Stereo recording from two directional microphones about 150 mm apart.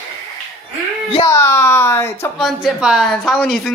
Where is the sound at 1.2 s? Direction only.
20° left (ahead or behind).